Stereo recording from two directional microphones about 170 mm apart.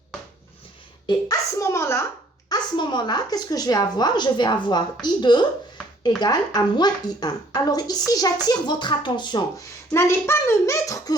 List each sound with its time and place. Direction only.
1.0 s a child's voice: 20° left (ahead or behind)
2.5 s a woman's voice: 25° left (ahead or behind)
9.9 s a child's voice: 15° left (ahead or behind)